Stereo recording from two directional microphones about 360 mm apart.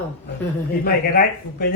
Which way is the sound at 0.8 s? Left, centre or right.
Left.